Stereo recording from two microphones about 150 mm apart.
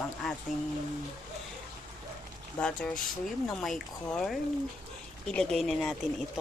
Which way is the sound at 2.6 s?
5° left (ahead or behind).